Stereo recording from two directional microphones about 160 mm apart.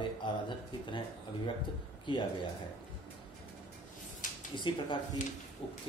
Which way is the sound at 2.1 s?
30° left (ahead or behind).